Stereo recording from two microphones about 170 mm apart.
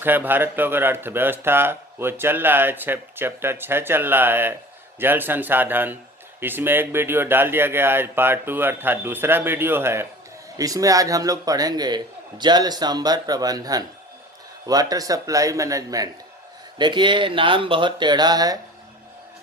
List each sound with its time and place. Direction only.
0.0 s a man's voice: 10° right (ahead or behind)